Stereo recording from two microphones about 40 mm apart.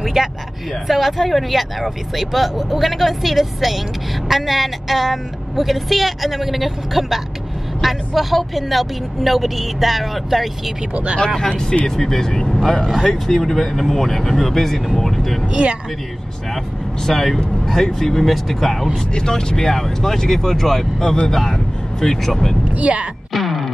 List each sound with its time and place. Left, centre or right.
0.0 s a sound: centre
0.8 s speech: centre
11.1 s speech: left
12.0 s speech: centre
15.6 s speech: right
17.0 s speech: centre
19.1 s speech: centre
22.8 s speech: right
23.3 s music: centre